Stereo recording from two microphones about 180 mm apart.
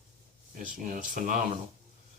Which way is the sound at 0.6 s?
45° right (ahead or behind).